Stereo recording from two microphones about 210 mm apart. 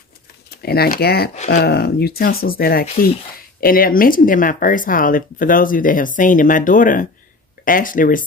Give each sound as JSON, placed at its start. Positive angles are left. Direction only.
{"t": 0.5, "sound": "speech", "side_deg": 50}
{"t": 1.3, "sound": "speech", "side_deg": 35}
{"t": 1.6, "sound": "speech", "side_deg": 50}